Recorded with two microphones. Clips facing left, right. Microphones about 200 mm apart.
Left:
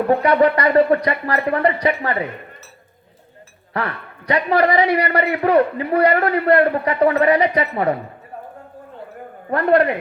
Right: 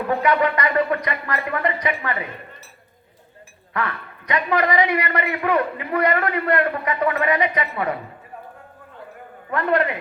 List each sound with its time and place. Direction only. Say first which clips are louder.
0.1 s a man's voice: left 4 dB; 35° left (ahead or behind)
3.7 s a man's voice: left 2 dB; 35° left (ahead or behind)
9.5 s a man's voice: left 5 dB; 35° left (ahead or behind)